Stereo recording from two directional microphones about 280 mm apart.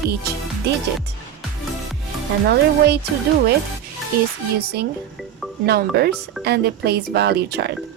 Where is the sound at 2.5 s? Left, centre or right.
Right.